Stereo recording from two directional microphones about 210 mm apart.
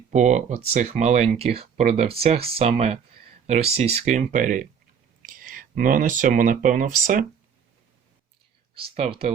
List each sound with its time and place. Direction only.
0.1 s speech: 35° right (ahead or behind)
8.7 s speech: 25° right (ahead or behind)